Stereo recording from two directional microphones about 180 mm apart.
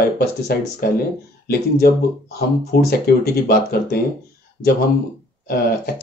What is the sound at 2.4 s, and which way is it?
Speech, 60° left (ahead or behind).